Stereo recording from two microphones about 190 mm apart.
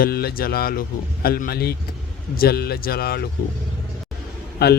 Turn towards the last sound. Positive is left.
turn(degrees=60)  # may be behind; listen again after turning